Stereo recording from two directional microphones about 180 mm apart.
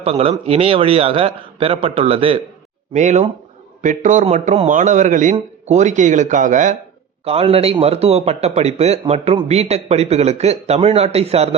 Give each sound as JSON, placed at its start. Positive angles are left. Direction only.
{"t": 0.0, "sound": "a man's voice", "side_deg": -30}
{"t": 7.3, "sound": "speech", "side_deg": -35}